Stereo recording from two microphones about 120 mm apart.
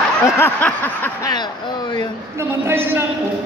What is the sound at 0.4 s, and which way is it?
Snicker, 15° left (ahead or behind).